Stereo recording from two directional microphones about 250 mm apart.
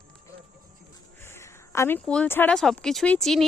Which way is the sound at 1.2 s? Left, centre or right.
Centre.